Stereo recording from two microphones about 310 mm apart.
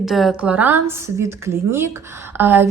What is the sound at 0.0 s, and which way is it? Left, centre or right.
Speech, centre.